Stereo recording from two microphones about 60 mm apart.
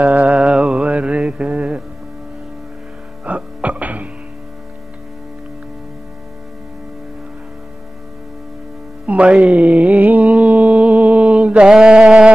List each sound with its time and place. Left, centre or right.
0.0 s music: right
3.3 s music: right
9.0 s music: right
11.7 s a sound: centre